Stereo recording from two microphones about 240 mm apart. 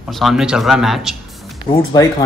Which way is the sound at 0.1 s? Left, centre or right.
Centre.